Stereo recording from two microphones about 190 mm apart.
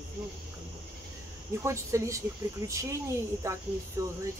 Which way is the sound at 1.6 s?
15° right (ahead or behind).